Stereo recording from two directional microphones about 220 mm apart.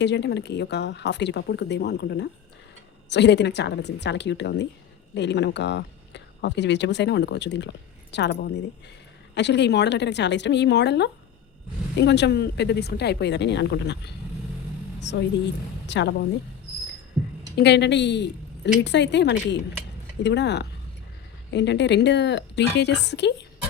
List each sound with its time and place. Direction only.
0.0 s speech: 50° left (ahead or behind)
17.6 s a woman's voice: 50° left (ahead or behind)